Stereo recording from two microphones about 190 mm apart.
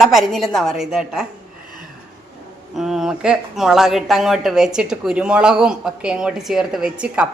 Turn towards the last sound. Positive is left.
turn(degrees=-5)  # may be behind; listen again after turning